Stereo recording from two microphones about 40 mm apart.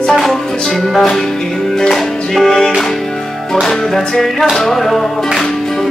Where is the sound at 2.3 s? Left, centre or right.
Centre.